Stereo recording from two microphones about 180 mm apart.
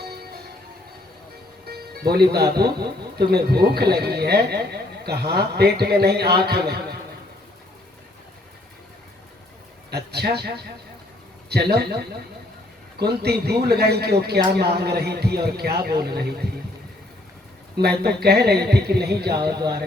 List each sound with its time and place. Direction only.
0.0 s church bell: 60° right (ahead or behind)
1.6 s music: 60° right (ahead or behind)
2.3 s speech: 65° right (ahead or behind)
9.9 s speech: 65° right (ahead or behind)
17.7 s speech: 65° right (ahead or behind)
19.3 s speech: 25° right (ahead or behind)